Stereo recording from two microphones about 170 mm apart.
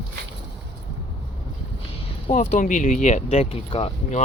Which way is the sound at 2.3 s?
45° left (ahead or behind).